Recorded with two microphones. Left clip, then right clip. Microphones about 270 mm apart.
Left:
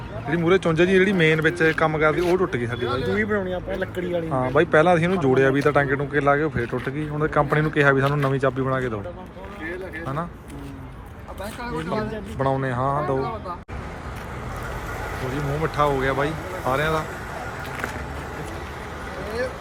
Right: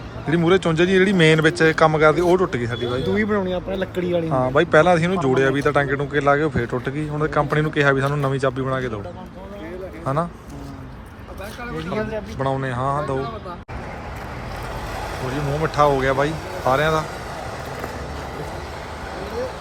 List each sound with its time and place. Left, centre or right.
0.3 s speech: centre
3.2 s speech: right
4.3 s speech: centre
12.4 s speech: centre
15.6 s speech: centre